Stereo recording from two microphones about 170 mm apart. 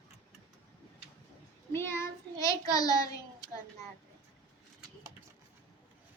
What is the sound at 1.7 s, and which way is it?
Child singing, 15° left (ahead or behind).